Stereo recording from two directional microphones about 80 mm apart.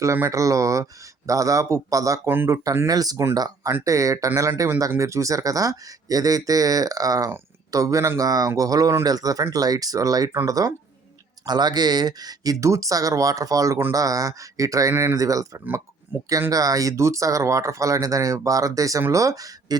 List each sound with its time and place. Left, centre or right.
0.0 s speech: right
3.8 s speech: right
11.4 s speech: right
16.1 s speech: right
16.5 s speech: right